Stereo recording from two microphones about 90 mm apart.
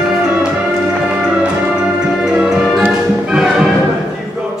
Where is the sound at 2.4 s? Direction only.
Centre (ahead or behind).